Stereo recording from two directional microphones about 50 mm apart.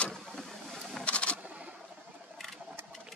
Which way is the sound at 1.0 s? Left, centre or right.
Left.